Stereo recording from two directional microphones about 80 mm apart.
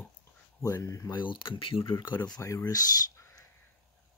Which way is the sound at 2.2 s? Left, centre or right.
Left.